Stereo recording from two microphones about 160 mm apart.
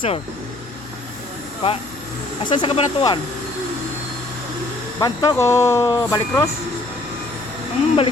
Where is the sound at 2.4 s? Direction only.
30° left (ahead or behind).